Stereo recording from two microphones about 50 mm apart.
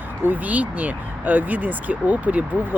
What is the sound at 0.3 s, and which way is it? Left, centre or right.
Speech, right.